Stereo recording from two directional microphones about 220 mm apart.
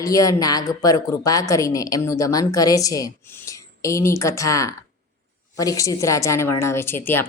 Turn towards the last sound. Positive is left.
turn(degrees=10)  # may be behind; listen again after turning